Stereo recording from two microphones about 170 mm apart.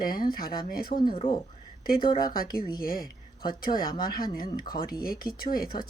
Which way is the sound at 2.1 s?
60° left (ahead or behind).